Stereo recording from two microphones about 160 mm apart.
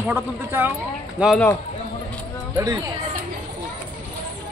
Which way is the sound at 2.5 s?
25° right (ahead or behind).